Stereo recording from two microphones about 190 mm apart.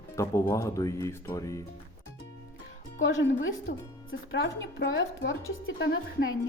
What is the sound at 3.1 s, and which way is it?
Speech, 90° left.